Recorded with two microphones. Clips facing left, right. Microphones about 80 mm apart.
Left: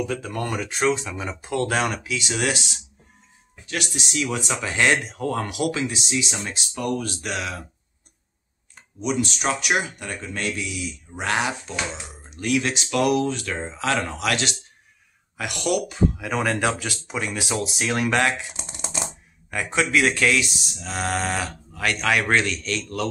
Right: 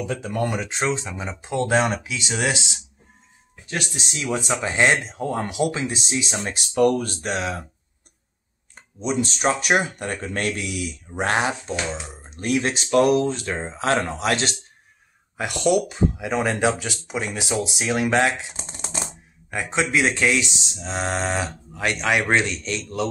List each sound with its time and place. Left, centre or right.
0.0 s speech: centre
3.7 s speech: right
8.7 s speech: right
16.3 s speech: centre
19.5 s speech: right